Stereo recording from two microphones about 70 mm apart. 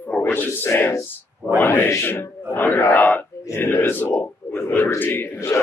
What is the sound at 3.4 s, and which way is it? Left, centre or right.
A man's voice, left.